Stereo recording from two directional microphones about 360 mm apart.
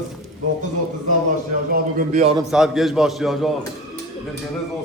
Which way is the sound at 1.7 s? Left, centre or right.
Right.